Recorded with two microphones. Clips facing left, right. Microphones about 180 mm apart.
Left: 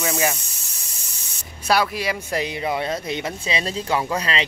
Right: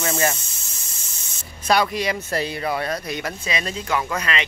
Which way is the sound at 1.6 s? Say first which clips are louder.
Right 1 dB; 5° left (ahead or behind).